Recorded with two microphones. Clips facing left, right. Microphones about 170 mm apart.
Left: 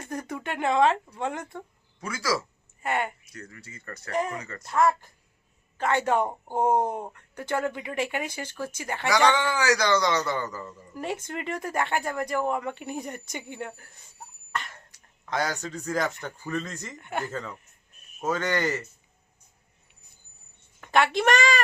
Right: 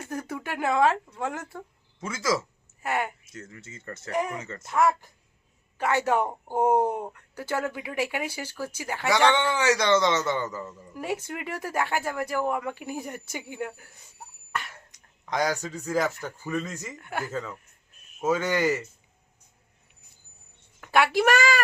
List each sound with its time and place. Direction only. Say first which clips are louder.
0.0 s speech: even; 5° right (ahead or behind)
2.0 s a man's voice: right 1 dB; 25° right (ahead or behind)
2.8 s speech: even; 5° right (ahead or behind)
3.2 s a man's voice: right 1 dB; 25° right (ahead or behind)
4.1 s speech: even; 10° right (ahead or behind)
4.4 s a man's voice: right 1 dB; 25° right (ahead or behind)
4.6 s speech: even; 10° right (ahead or behind)
9.3 s a man's voice: right 1 dB; 25° right (ahead or behind)
10.9 s speech: right 1 dB; 5° right (ahead or behind)
20.8 s speech: right 1 dB; 5° right (ahead or behind)